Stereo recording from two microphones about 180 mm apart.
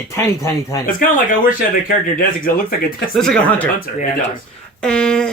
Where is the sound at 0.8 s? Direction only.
50° left (ahead or behind).